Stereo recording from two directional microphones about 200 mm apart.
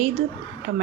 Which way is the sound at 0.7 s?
55° right (ahead or behind).